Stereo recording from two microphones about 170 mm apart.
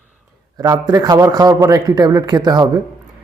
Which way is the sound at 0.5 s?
20° right (ahead or behind).